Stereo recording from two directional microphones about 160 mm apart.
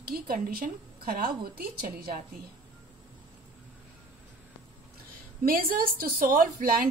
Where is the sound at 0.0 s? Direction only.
70° right (ahead or behind).